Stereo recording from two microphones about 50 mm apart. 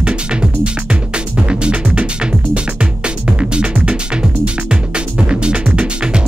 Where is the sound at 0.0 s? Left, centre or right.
Centre.